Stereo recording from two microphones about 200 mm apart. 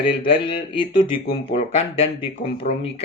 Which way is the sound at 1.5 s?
35° left (ahead or behind).